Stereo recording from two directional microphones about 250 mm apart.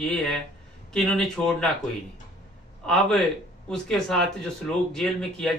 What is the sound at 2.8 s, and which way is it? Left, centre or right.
A man's voice, centre.